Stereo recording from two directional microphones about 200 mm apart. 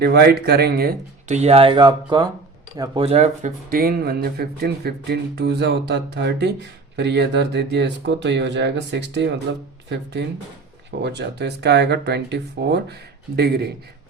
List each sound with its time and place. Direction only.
0.0 s speech: 55° right (ahead or behind)
1.3 s speech: 30° right (ahead or behind)
3.0 s speech: 30° right (ahead or behind); by 13.7 s 55° right (ahead or behind)